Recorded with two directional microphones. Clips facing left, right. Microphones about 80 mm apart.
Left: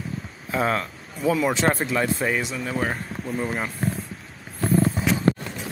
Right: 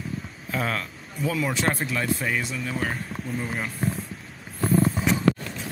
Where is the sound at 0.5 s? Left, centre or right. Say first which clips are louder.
Left 5 dB; left.